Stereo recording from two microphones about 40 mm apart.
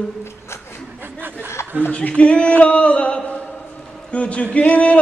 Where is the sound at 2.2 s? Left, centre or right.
Left.